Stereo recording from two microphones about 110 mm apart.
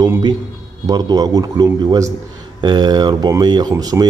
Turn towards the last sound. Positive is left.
turn(degrees=-35)  # may be behind; listen again after turning